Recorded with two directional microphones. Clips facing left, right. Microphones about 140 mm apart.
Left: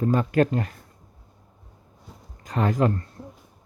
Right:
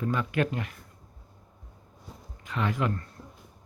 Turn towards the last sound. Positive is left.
turn(degrees=35)  # may be behind; listen again after turning